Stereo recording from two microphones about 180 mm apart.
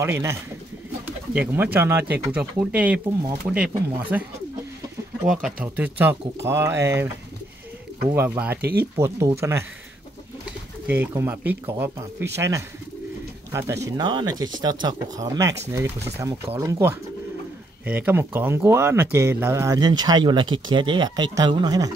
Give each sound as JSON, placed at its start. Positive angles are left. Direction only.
{"t": 0.0, "sound": "speech", "side_deg": -15}
{"t": 5.2, "sound": "speech", "side_deg": -5}
{"t": 8.1, "sound": "speech", "side_deg": -10}
{"t": 8.5, "sound": "speech", "side_deg": -60}
{"t": 8.9, "sound": "speech", "side_deg": -15}
{"t": 10.9, "sound": "speech", "side_deg": -10}